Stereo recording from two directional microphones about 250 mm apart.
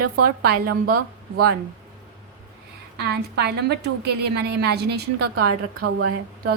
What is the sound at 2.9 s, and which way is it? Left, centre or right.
A woman's voice, right.